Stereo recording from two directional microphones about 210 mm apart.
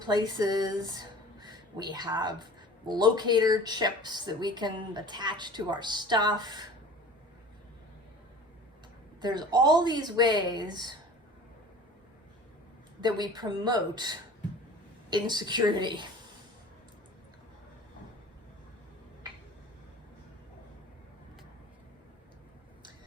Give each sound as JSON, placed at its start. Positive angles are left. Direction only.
{"t": 0.0, "sound": "speech", "side_deg": -20}
{"t": 9.2, "sound": "speech", "side_deg": -20}
{"t": 13.0, "sound": "speech", "side_deg": -20}